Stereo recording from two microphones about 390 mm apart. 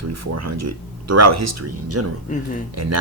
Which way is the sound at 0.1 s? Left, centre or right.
Right.